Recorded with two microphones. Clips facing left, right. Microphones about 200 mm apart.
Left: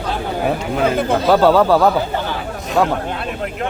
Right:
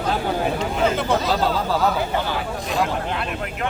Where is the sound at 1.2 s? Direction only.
65° left (ahead or behind).